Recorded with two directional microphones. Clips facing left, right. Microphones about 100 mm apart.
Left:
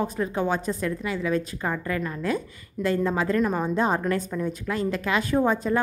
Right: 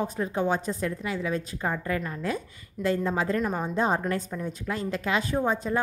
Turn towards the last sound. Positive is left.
turn(degrees=-25)  # may be behind; listen again after turning